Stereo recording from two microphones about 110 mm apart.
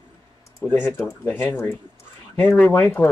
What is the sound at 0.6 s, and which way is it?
Speech, 20° left (ahead or behind).